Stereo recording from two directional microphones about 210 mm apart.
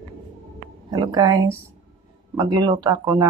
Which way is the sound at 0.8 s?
20° right (ahead or behind).